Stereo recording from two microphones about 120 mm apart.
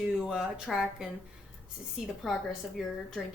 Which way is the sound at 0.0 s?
5° right (ahead or behind).